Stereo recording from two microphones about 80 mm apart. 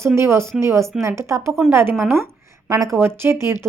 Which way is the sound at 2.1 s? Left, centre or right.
Right.